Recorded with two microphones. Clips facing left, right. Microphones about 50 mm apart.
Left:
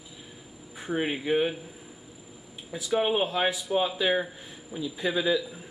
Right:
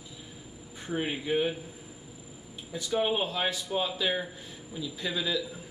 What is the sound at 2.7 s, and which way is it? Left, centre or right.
Speech, centre.